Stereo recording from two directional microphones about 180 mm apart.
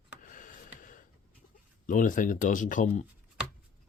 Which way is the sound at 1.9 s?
45° left (ahead or behind).